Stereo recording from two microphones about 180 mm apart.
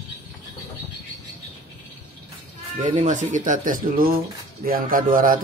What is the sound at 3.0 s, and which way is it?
Speech, 45° right (ahead or behind).